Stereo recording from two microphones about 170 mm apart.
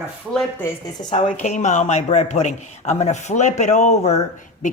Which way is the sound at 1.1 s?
40° left (ahead or behind).